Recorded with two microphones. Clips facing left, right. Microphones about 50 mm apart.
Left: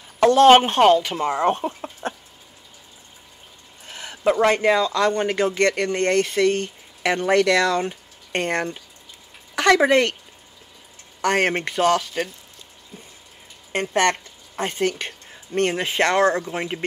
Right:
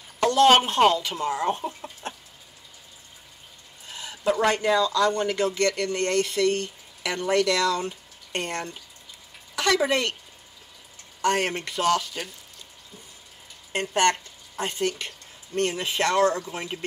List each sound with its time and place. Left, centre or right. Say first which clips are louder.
0.2 s speech: left 5 dB; left
1.7 s a sound: left 6 dB; left
3.8 s speech: left 4 dB; left
11.1 s speech: left 4 dB; left
13.7 s a woman's voice: left 2 dB; left